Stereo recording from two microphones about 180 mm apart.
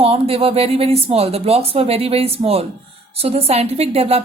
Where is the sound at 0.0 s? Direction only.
30° right (ahead or behind).